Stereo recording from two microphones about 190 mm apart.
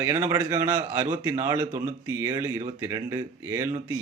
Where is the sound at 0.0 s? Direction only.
15° right (ahead or behind).